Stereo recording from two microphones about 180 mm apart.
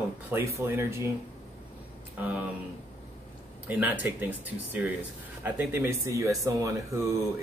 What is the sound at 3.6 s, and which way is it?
Speech, 10° right (ahead or behind).